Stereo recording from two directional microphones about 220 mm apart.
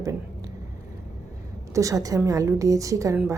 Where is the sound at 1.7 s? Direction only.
15° right (ahead or behind).